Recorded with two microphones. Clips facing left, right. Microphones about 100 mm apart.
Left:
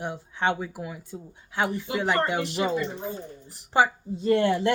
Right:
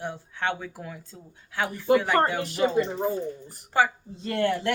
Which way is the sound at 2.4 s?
45° right (ahead or behind).